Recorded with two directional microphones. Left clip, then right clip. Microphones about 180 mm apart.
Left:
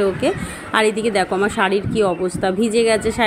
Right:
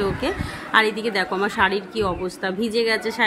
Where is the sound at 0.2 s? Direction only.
10° left (ahead or behind).